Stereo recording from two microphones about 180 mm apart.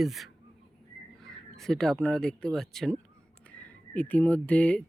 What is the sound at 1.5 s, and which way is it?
Speech, centre (ahead or behind).